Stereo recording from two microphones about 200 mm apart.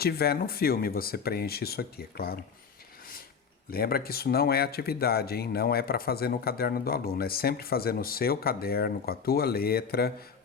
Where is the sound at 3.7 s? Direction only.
50° left (ahead or behind).